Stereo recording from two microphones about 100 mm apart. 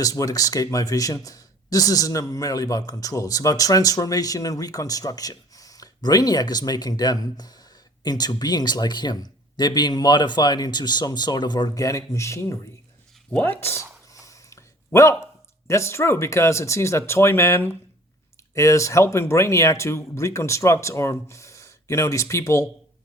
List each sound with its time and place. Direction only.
0.0 s speech: 35° left (ahead or behind)
13.3 s speech: 20° left (ahead or behind)
14.1 s a sound: 35° left (ahead or behind)
15.6 s speech: 30° left (ahead or behind)